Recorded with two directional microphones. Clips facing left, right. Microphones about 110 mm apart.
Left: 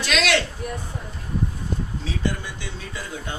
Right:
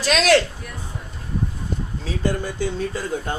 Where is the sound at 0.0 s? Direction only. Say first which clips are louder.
Right 5 dB; 40° right (ahead or behind).